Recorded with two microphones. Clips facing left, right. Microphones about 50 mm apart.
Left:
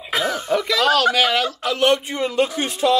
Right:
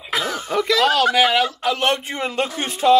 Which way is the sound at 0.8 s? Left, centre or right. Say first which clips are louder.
Even; right.